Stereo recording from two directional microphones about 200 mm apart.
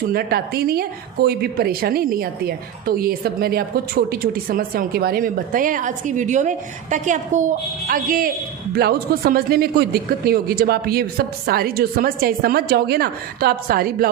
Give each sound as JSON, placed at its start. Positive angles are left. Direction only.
{"t": 0.1, "sound": "a woman's voice", "side_deg": -50}